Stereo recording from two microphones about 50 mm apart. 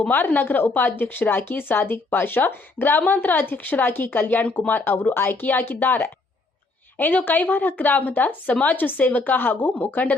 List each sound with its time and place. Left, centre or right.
0.3 s speech: left
4.9 s speech: left